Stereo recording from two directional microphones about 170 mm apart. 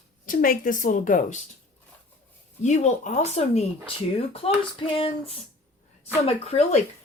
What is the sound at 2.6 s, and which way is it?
Speech, 45° left (ahead or behind).